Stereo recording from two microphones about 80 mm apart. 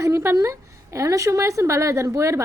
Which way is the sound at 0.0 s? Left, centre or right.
Right.